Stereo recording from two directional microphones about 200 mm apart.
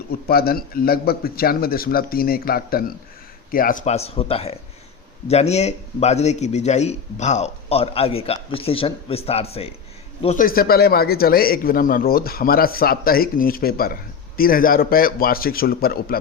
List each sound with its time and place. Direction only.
0.3 s a man's voice: 50° left (ahead or behind); by 9.7 s 30° left (ahead or behind)
10.2 s a man's voice: 45° left (ahead or behind)